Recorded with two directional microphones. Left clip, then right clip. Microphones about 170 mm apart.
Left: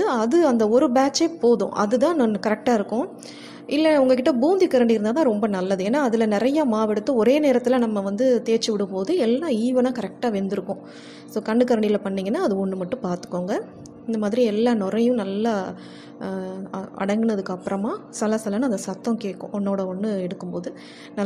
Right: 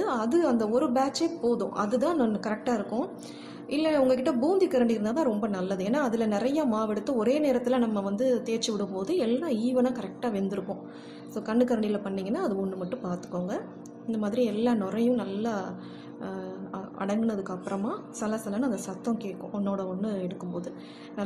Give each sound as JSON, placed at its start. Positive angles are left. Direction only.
{"t": 0.0, "sound": "a woman's voice", "side_deg": 25}